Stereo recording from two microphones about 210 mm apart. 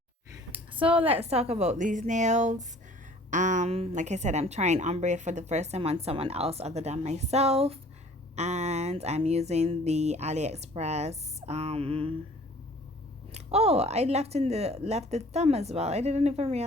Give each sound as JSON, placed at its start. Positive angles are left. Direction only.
{"t": 0.5, "sound": "a sound", "side_deg": -25}
{"t": 1.1, "sound": "a woman's voice", "side_deg": -30}
{"t": 13.3, "sound": "a woman's voice", "side_deg": -30}